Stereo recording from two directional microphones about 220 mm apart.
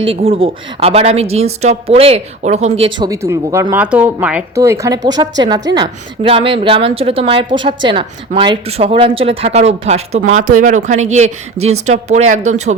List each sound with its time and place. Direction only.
0.0 s a woman's voice: 25° right (ahead or behind)
3.1 s a woman's voice: 15° right (ahead or behind); by 12.7 s 30° right (ahead or behind)